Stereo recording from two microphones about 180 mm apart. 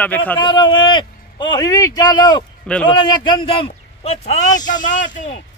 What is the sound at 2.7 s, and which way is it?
Speech, 5° left (ahead or behind).